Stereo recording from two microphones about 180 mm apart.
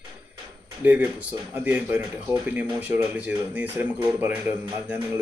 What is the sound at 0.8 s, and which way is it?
Speech, 10° right (ahead or behind).